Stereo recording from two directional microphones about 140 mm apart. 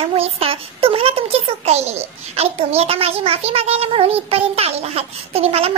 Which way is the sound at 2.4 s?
45° right (ahead or behind).